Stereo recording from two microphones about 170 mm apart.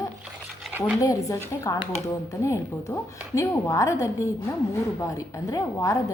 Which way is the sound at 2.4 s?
15° left (ahead or behind).